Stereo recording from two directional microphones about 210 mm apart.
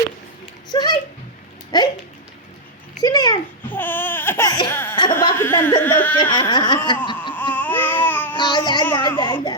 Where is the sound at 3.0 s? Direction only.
20° left (ahead or behind).